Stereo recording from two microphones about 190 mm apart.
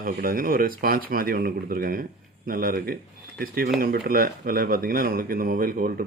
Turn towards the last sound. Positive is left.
turn(degrees=-50)  # may be behind; listen again after turning